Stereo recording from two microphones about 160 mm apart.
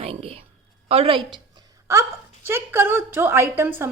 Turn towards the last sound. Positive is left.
turn(degrees=-15)  # may be behind; listen again after turning